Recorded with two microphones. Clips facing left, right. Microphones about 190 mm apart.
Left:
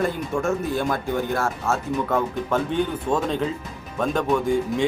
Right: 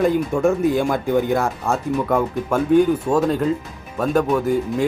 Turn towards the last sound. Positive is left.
turn(degrees=-5)  # may be behind; listen again after turning